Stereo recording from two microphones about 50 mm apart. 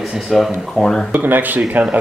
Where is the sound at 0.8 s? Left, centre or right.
Centre.